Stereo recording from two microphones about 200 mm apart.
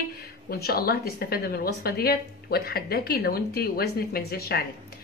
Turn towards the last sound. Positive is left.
turn(degrees=50)  # may be behind; listen again after turning